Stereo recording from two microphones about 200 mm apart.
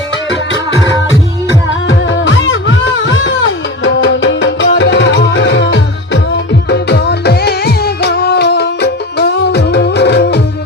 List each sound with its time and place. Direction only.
1.9 s music: 65° left (ahead or behind)